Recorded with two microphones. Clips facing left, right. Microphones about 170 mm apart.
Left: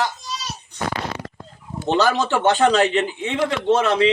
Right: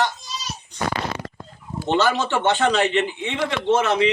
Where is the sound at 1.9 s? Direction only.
40° left (ahead or behind).